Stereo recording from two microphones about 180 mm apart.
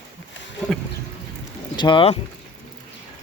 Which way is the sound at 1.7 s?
25° left (ahead or behind).